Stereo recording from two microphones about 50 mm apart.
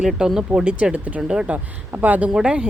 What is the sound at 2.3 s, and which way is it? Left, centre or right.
Speech, centre.